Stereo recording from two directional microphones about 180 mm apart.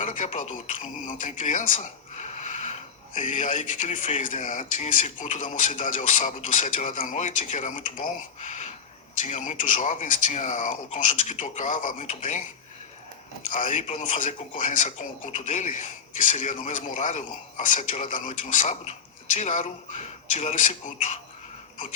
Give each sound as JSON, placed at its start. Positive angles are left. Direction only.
{"t": 0.0, "sound": "speech", "side_deg": 45}
{"t": 13.5, "sound": "speech", "side_deg": 45}